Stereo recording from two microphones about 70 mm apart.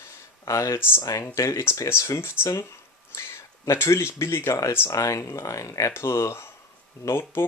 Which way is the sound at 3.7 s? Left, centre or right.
Left.